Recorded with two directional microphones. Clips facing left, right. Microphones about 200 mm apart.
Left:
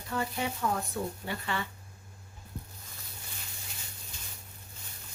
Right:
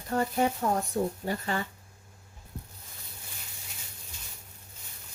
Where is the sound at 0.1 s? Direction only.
45° right (ahead or behind).